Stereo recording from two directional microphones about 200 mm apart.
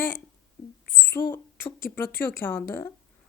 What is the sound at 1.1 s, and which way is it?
Speech, 15° left (ahead or behind).